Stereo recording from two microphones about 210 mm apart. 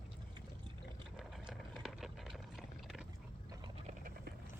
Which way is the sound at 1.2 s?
Centre (ahead or behind).